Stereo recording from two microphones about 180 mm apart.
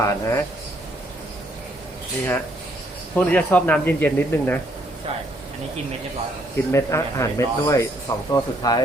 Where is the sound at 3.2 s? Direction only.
10° left (ahead or behind).